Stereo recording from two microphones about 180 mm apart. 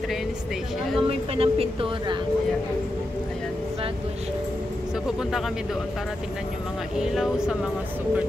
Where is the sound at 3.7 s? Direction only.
35° right (ahead or behind).